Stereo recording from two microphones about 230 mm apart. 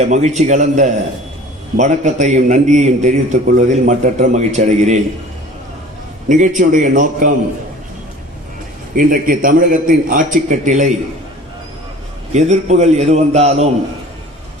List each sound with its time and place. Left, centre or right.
0.0 s a man's voice: right
6.2 s a man's voice: right
9.0 s a man's voice: right
12.3 s a man's voice: right